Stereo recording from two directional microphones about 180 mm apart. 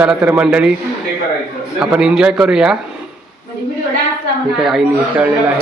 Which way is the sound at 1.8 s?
5° right (ahead or behind).